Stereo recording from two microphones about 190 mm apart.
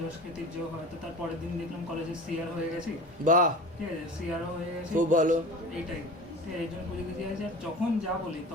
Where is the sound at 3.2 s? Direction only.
45° right (ahead or behind).